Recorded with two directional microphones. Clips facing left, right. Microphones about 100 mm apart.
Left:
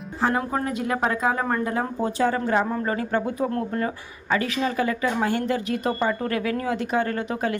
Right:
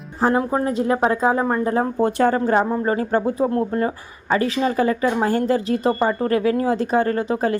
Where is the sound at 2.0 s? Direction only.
60° right (ahead or behind).